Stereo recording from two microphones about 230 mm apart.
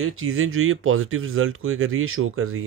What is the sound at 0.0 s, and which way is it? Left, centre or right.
Speech, right.